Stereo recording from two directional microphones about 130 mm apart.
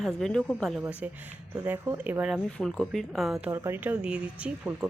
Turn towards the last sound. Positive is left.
turn(degrees=-10)  # may be behind; listen again after turning